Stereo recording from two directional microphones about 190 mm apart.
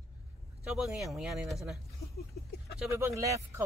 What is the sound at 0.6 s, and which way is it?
Speech, 5° right (ahead or behind).